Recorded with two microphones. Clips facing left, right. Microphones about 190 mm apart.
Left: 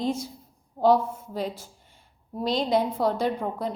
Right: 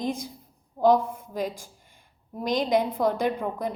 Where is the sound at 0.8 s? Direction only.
50° right (ahead or behind).